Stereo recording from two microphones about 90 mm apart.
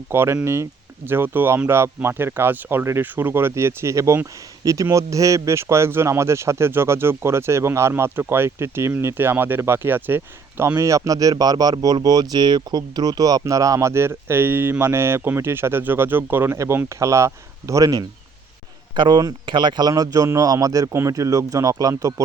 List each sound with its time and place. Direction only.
0.1 s speech: 30° right (ahead or behind)
18.9 s speech: 55° right (ahead or behind)
19.9 s speech: 40° right (ahead or behind)